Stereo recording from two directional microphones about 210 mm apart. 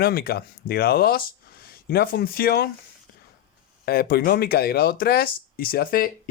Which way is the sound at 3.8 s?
45° left (ahead or behind).